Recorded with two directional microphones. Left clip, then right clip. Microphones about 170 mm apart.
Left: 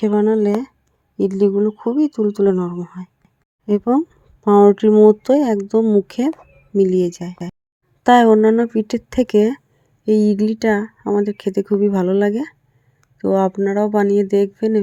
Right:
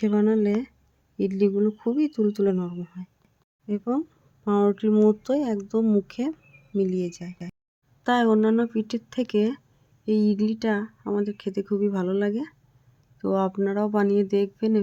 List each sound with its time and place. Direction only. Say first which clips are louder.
0.0 s speech: left 7 dB; 20° left (ahead or behind)
3.7 s speech: left 11 dB; 35° left (ahead or behind); by 6.1 s 20° left (ahead or behind)
6.7 s speech: left 11 dB; 30° left (ahead or behind)